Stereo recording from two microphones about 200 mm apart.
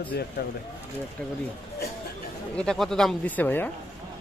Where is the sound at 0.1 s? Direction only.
55° left (ahead or behind).